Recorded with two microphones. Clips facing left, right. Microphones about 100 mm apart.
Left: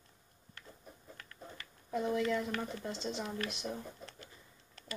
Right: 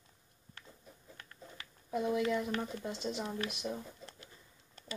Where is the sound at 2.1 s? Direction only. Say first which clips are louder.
Even; 20° right (ahead or behind).